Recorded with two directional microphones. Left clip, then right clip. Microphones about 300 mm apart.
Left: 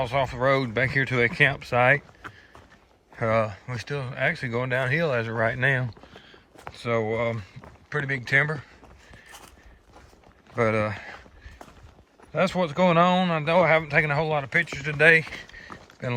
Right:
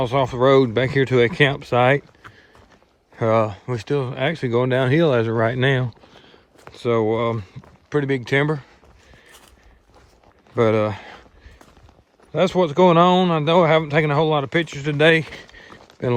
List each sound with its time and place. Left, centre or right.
0.0 s speech: right
3.2 s speech: right
6.1 s a sound: centre
7.9 s speech: centre
10.5 s speech: right
12.3 s speech: right
15.3 s a sound: right